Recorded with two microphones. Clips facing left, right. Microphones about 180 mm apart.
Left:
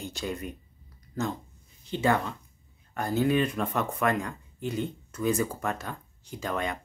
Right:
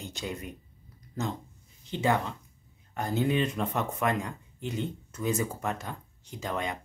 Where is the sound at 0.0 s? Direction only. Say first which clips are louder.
Left 3 dB; 20° right (ahead or behind).